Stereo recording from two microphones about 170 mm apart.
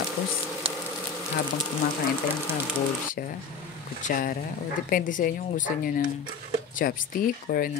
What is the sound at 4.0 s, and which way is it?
Speech, 55° left (ahead or behind).